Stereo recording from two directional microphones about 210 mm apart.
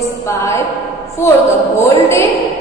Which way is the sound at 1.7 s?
15° left (ahead or behind).